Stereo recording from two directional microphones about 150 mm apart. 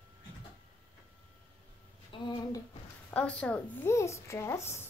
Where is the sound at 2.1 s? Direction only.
35° left (ahead or behind).